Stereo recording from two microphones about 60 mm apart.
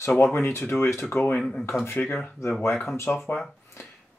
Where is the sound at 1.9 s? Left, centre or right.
Left.